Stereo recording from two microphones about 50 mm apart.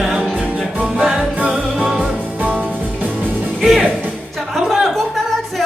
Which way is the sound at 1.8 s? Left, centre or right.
Centre.